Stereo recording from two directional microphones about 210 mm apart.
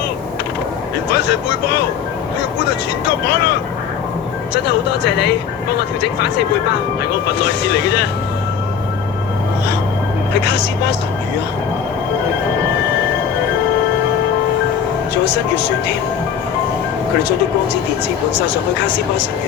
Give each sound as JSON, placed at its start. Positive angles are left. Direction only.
{"t": 1.1, "sound": "speech", "side_deg": 50}
{"t": 3.2, "sound": "speech", "side_deg": 50}
{"t": 10.4, "sound": "speech", "side_deg": 55}